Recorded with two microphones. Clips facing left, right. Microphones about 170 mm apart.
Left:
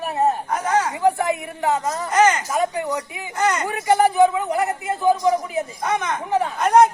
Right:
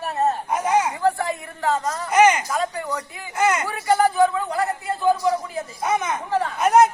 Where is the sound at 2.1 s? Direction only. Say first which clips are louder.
Right 1 dB; 10° right (ahead or behind).